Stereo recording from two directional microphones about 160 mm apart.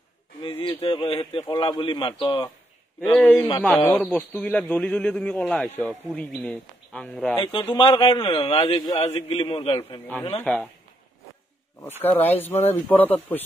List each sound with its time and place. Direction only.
0.4 s a sound: 30° left (ahead or behind)
3.0 s a man's voice: 10° left (ahead or behind)
3.3 s a man's voice: 25° left (ahead or behind)
3.8 s a man's voice: 10° left (ahead or behind)
7.7 s a man's voice: 30° left (ahead or behind)
8.9 s a man's voice: 40° left (ahead or behind)
10.0 s a man's voice: 10° left (ahead or behind)
12.0 s a man's voice: 10° left (ahead or behind)